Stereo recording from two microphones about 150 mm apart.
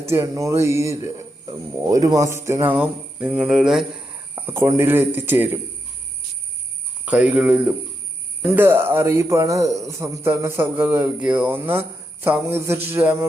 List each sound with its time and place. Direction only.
0.0 s a man's voice: 15° right (ahead or behind)
4.4 s a man's voice: 15° right (ahead or behind)
7.0 s a man's voice: 10° right (ahead or behind)